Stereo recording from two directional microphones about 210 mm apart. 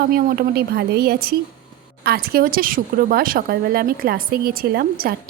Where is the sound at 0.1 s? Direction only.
45° right (ahead or behind).